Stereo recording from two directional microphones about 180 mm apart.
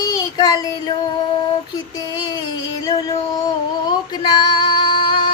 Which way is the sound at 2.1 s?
20° left (ahead or behind).